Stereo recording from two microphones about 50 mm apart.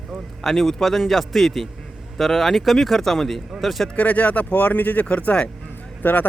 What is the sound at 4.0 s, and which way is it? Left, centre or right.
Speech, left.